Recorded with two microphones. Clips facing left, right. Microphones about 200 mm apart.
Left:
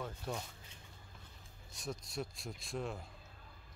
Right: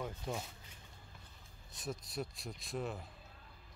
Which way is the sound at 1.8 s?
Centre (ahead or behind).